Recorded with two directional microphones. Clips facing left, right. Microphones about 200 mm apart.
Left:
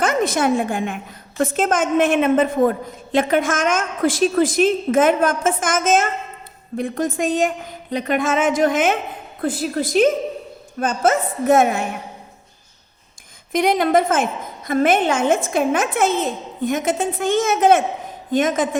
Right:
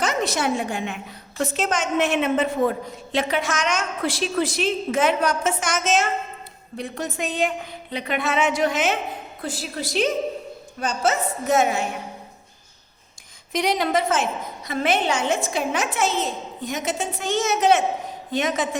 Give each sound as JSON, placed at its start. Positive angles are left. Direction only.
{"t": 0.0, "sound": "a woman's voice", "side_deg": 55}
{"t": 13.5, "sound": "a woman's voice", "side_deg": 50}